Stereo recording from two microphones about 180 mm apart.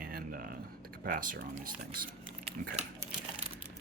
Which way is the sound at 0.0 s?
55° right (ahead or behind).